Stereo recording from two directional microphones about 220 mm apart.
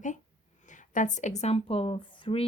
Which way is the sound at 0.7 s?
35° left (ahead or behind).